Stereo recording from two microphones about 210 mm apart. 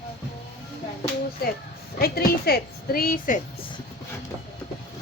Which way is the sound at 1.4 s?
45° left (ahead or behind).